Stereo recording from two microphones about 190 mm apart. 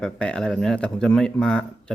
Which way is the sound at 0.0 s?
5° left (ahead or behind).